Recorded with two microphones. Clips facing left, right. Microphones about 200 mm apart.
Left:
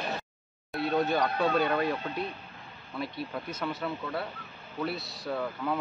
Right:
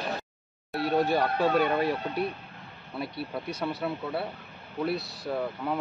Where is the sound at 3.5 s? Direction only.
35° right (ahead or behind).